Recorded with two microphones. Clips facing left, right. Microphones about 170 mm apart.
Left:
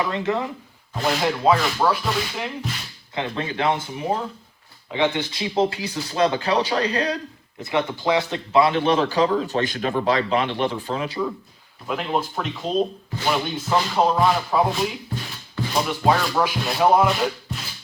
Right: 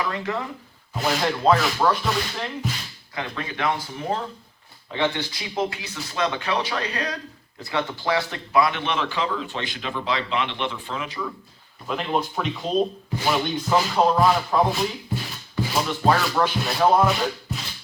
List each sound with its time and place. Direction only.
0.0 s speech: 25° left (ahead or behind)
0.9 s music: centre (ahead or behind)
3.2 s a man's voice: 30° left (ahead or behind)
7.6 s a man's voice: 20° left (ahead or behind)
11.9 s music: centre (ahead or behind)